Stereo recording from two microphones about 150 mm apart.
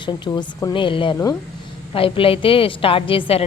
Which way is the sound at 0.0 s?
30° left (ahead or behind).